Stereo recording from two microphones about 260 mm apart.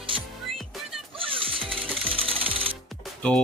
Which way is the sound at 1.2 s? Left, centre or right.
Right.